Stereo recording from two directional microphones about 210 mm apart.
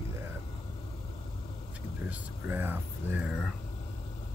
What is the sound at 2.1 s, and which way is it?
Speech, 10° right (ahead or behind).